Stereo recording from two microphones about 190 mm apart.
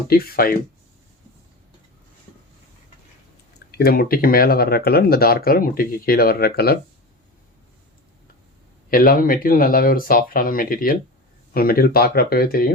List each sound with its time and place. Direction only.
0.1 s speech: 50° left (ahead or behind)
3.8 s speech: 55° left (ahead or behind)
8.9 s speech: 50° left (ahead or behind)